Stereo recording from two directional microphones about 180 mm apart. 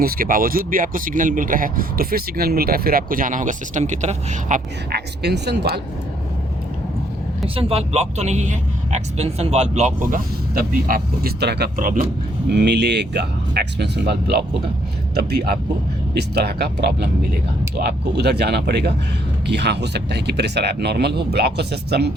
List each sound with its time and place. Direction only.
0.0 s speech: 55° right (ahead or behind)
4.9 s speech: 65° right (ahead or behind)
7.4 s speech: 30° right (ahead or behind); by 11.7 s 65° right (ahead or behind)
11.8 s speech: 45° right (ahead or behind)
12.5 s speech: 65° right (ahead or behind)